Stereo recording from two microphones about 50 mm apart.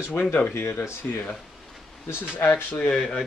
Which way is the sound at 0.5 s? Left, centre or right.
Left.